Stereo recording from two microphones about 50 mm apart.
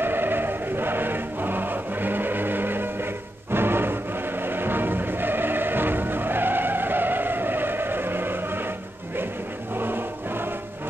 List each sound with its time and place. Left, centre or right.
0.0 s music: right
9.8 s music: right